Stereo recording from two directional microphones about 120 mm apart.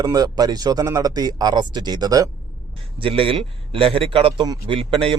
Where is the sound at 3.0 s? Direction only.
50° right (ahead or behind).